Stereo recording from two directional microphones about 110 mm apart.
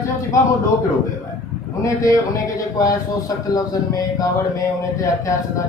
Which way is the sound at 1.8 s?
30° left (ahead or behind).